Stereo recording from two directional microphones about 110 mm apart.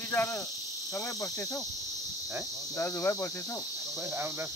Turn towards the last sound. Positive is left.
turn(degrees=20)  # may be behind; listen again after turning